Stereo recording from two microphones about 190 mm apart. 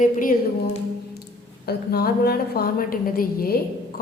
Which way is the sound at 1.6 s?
55° left (ahead or behind).